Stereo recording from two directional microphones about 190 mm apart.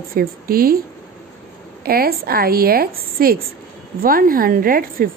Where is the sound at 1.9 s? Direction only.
55° right (ahead or behind).